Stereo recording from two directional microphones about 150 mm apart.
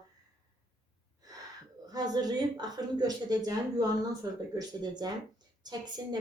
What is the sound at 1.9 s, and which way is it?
A woman's voice, 25° right (ahead or behind).